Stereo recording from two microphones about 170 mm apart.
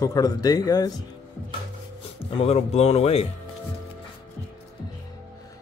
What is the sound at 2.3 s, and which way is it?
Speech, 35° left (ahead or behind).